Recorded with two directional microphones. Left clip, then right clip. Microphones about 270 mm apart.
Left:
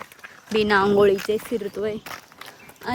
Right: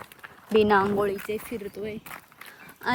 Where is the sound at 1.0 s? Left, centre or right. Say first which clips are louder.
Left 9 dB; left.